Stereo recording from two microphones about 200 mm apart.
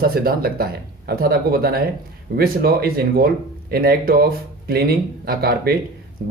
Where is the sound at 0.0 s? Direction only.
50° right (ahead or behind).